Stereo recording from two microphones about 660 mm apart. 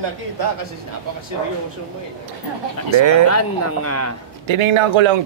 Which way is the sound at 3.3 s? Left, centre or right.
Left.